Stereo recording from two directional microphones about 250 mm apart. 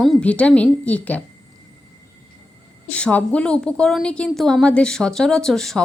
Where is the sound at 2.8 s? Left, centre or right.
Centre.